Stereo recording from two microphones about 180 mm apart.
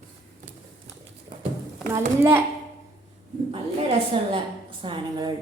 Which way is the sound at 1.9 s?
15° right (ahead or behind).